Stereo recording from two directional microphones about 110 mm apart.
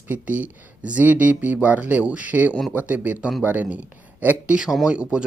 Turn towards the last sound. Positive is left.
turn(degrees=-10)  # may be behind; listen again after turning